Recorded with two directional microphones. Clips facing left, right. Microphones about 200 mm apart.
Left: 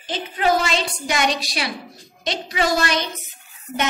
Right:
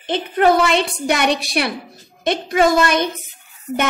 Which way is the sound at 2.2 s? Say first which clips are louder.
Right 7 dB; 55° right (ahead or behind).